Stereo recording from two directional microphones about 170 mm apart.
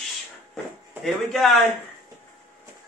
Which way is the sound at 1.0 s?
Centre (ahead or behind).